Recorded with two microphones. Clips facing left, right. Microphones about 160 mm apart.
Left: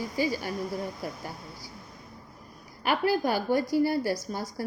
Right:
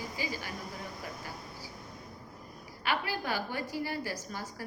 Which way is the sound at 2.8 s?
45° left (ahead or behind).